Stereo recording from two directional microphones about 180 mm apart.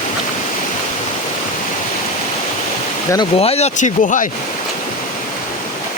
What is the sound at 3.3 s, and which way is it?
Speech, 35° left (ahead or behind).